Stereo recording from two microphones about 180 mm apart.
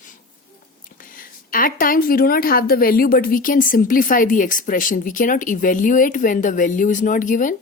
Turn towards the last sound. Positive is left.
turn(degrees=45)  # may be behind; listen again after turning